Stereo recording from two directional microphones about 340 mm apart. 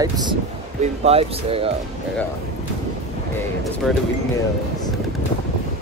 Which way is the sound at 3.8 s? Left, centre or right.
Centre.